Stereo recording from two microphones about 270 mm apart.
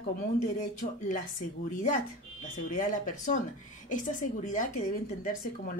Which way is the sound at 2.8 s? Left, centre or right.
Left.